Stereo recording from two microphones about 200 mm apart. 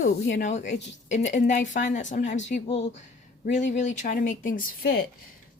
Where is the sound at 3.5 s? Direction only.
35° left (ahead or behind).